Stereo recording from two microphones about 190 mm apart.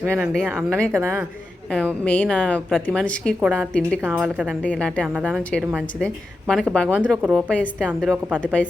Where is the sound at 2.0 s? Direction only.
10° left (ahead or behind).